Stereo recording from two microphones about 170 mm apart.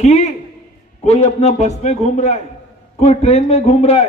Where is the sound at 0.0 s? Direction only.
40° left (ahead or behind).